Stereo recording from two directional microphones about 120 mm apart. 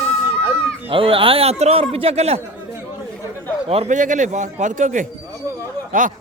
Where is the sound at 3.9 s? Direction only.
90° right.